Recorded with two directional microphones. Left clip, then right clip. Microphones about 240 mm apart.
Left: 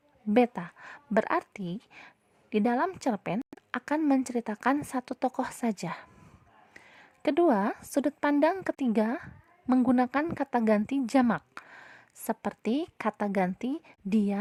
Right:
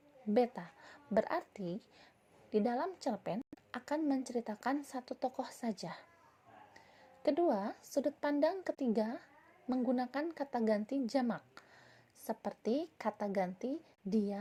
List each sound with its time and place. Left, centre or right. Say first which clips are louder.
0.3 s a woman's voice: left 8 dB; left
6.7 s music: left 7 dB; left
7.9 s a woman's voice: left 7 dB; left
12.6 s a woman's voice: left 5 dB; left
13.0 s a woman's voice: left 7 dB; left
13.8 s a woman's voice: left 7 dB; left